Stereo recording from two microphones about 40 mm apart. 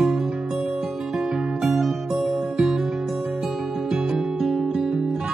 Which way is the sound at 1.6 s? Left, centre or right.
Centre.